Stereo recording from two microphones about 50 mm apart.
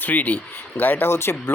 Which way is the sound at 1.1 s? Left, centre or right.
Left.